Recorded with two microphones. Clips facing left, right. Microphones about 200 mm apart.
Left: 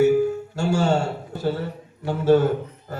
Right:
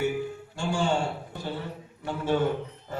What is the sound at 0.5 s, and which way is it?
Speech, 45° left (ahead or behind).